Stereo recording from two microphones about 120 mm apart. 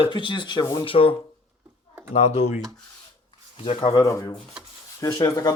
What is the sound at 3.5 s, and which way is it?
Speech, 55° left (ahead or behind).